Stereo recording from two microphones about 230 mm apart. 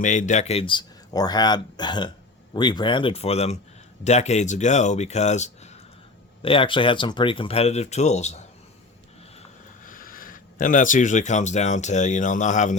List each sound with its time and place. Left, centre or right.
0.0 s speech: left
9.8 s speech: left